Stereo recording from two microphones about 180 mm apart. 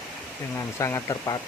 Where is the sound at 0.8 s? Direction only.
20° left (ahead or behind).